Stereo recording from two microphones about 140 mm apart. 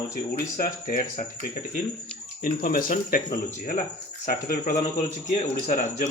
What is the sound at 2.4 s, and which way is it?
Speech, 90° left.